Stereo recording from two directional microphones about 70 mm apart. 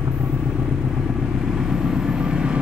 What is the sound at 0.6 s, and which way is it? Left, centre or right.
Vehicle, centre.